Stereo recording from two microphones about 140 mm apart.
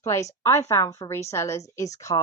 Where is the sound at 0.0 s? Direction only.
20° left (ahead or behind).